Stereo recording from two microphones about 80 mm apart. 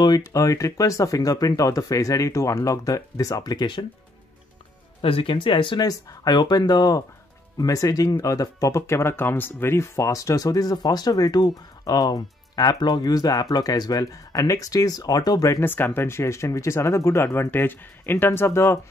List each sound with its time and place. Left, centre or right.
0.3 s speech: left
5.2 s speech: left
5.8 s speech: left
7.5 s speech: left
15.6 s speech: left